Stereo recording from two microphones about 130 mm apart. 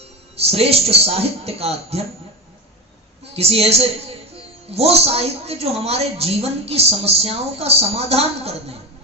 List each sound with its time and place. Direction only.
0.4 s a man's voice: 50° right (ahead or behind)
3.3 s a man's voice: 50° right (ahead or behind)